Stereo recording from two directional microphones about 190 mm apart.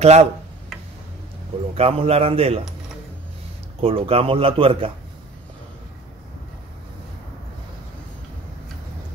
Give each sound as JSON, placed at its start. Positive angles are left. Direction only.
{"t": 0.0, "sound": "a man's voice", "side_deg": -35}
{"t": 1.8, "sound": "a man's voice", "side_deg": -30}
{"t": 3.8, "sound": "speech", "side_deg": -30}